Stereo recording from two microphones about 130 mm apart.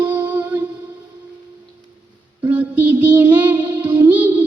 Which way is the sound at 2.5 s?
10° right (ahead or behind).